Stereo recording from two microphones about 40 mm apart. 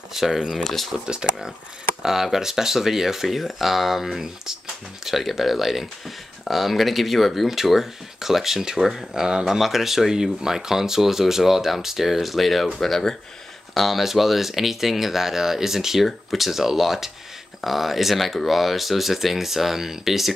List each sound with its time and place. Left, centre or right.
0.1 s speech: centre
0.6 s speech: centre
1.0 s speech: right
2.0 s speech: centre